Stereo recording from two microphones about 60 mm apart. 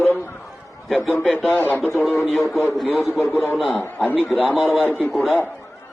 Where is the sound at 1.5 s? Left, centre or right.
Left.